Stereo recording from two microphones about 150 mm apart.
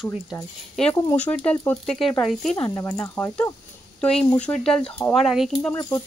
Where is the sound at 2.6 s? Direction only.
20° left (ahead or behind); by 5.7 s centre (ahead or behind).